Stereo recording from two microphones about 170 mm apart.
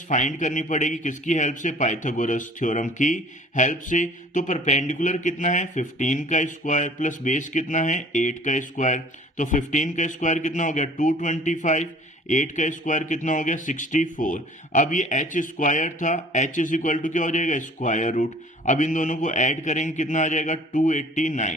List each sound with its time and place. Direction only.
0.1 s speech: 45° left (ahead or behind)